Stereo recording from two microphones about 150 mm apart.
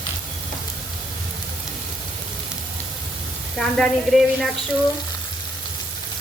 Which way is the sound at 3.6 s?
5° left (ahead or behind).